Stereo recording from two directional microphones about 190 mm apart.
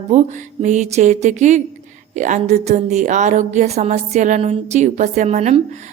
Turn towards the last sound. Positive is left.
turn(degrees=-35)  # may be behind; listen again after turning